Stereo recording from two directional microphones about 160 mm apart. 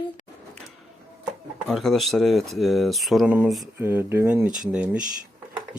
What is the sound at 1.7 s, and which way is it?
Speech, centre (ahead or behind).